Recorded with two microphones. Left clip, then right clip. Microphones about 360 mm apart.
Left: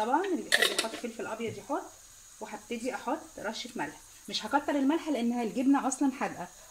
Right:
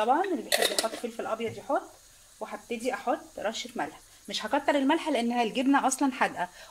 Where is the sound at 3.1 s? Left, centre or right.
Right.